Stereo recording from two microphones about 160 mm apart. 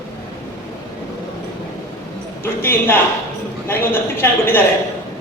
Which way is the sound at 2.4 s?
15° left (ahead or behind).